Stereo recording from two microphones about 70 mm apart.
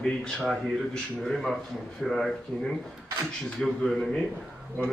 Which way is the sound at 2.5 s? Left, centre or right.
Centre.